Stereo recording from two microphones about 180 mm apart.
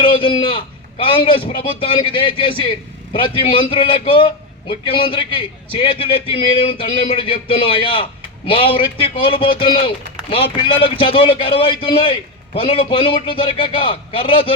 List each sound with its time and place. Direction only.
0.0 s a man's voice: 30° left (ahead or behind)